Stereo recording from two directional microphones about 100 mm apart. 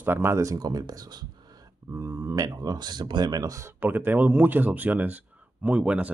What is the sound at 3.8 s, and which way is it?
Speech, 20° right (ahead or behind).